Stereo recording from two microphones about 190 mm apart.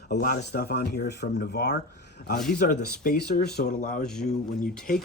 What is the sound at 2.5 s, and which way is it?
Speech, 45° left (ahead or behind).